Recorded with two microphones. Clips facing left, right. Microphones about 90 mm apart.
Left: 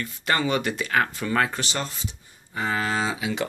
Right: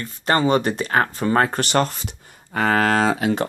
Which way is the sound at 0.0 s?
35° right (ahead or behind).